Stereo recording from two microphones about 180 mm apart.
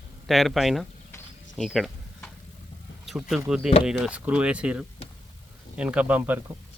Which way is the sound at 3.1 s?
Centre (ahead or behind).